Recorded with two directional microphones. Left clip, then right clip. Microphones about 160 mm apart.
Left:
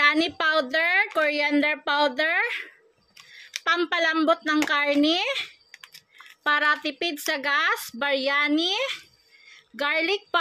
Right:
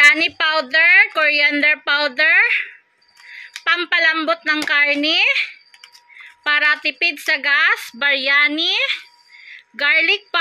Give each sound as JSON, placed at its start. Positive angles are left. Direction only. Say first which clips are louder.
{"t": 0.0, "sound": "a woman's voice", "louder": "right 8 dB", "side_deg": 25}